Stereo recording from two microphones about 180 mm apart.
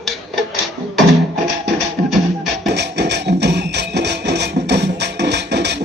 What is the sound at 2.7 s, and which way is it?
Music, 70° right (ahead or behind).